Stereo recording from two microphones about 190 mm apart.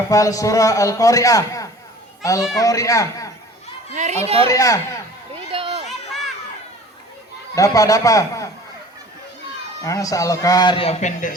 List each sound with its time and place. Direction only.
0.1 s a man's voice: 15° left (ahead or behind)
3.9 s speech: 40° right (ahead or behind)
4.4 s a man's voice: 20° left (ahead or behind)
5.3 s children playing: 30° right (ahead or behind)
7.5 s a man's voice: 15° left (ahead or behind)
9.8 s speech: 15° left (ahead or behind); by 11.3 s 40° left (ahead or behind)